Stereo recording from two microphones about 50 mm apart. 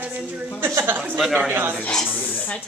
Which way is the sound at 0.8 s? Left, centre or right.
Right.